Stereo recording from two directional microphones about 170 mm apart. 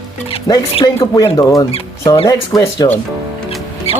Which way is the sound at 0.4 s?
25° left (ahead or behind).